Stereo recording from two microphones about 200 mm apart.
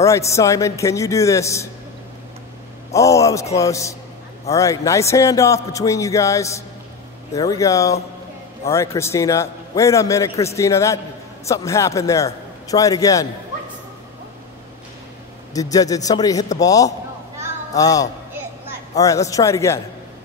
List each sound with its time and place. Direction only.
0.0 s a man's voice: 15° left (ahead or behind)
2.9 s a man's voice: 15° left (ahead or behind)
15.5 s a man's voice: 15° left (ahead or behind)